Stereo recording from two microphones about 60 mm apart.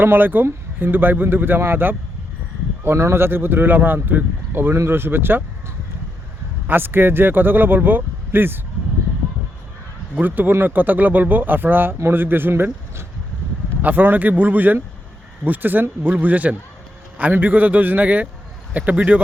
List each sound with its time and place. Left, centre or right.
0.0 s speech: right
2.8 s speech: right
6.7 s speech: right
10.2 s speech: right